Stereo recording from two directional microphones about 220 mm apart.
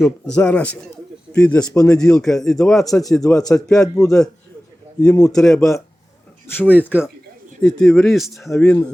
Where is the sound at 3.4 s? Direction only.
15° left (ahead or behind).